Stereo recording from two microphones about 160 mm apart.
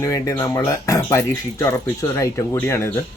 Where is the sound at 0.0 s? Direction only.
20° left (ahead or behind).